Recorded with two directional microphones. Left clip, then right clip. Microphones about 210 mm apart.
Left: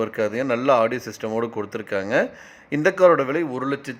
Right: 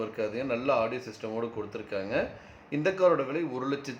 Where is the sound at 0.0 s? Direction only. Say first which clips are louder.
Left 9 dB; 35° left (ahead or behind).